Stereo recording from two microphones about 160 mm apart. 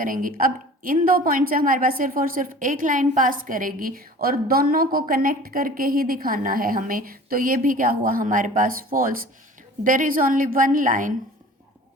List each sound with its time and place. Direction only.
0.0 s a woman's voice: 60° right (ahead or behind)